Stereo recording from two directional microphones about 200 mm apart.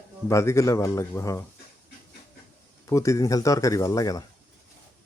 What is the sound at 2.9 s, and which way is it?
Speech, 15° left (ahead or behind).